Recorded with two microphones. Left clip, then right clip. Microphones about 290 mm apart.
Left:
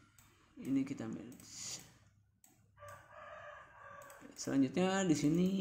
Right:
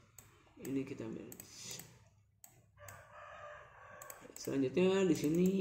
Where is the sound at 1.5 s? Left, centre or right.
Left.